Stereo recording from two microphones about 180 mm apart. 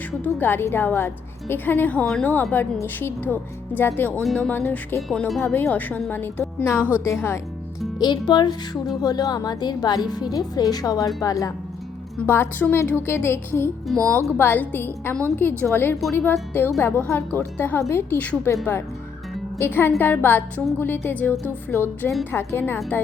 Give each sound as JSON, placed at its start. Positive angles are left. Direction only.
{"t": 0.3, "sound": "a woman's voice", "side_deg": 10}